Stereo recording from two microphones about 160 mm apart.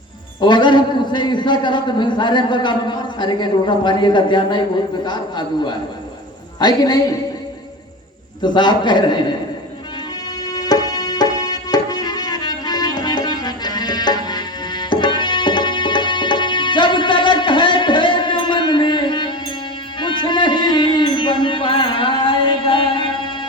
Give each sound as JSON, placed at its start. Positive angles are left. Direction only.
{"t": 0.3, "sound": "a man's voice", "side_deg": 30}
{"t": 8.4, "sound": "a man's voice", "side_deg": 30}
{"t": 10.5, "sound": "music", "side_deg": 25}